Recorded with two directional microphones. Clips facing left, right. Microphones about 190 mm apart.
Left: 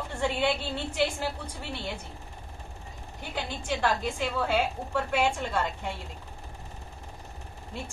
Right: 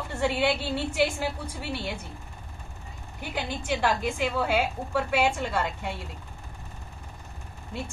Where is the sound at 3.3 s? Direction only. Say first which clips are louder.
Right 2 dB; 10° right (ahead or behind).